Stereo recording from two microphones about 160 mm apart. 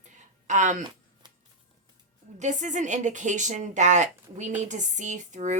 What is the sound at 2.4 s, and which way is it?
Speech, 50° right (ahead or behind).